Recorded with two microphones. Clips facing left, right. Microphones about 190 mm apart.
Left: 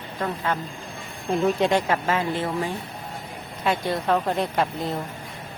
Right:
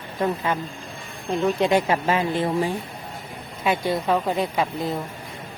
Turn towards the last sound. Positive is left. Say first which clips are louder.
# right 1 dB
turn(degrees=0)  # may be behind; listen again after turning